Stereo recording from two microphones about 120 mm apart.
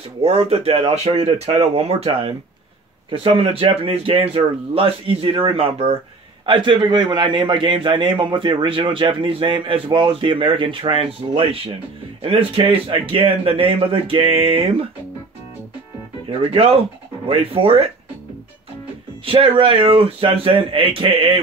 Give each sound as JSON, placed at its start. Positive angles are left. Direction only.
{"t": 0.2, "sound": "speech", "side_deg": -60}
{"t": 3.1, "sound": "a man's voice", "side_deg": -45}
{"t": 16.3, "sound": "a man's voice", "side_deg": -55}
{"t": 19.2, "sound": "a man's voice", "side_deg": -45}